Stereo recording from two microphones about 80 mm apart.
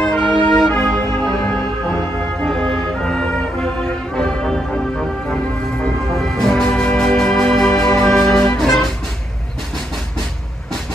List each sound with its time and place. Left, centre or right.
0.0 s music: centre